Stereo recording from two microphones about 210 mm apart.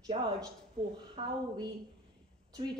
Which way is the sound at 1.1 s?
20° right (ahead or behind).